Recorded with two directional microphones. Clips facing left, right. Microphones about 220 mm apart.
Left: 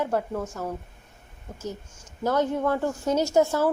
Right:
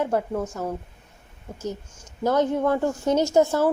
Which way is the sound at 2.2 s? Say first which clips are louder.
Right 3 dB; 15° right (ahead or behind).